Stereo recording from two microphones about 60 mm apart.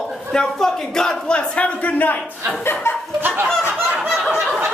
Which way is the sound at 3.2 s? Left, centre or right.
Right.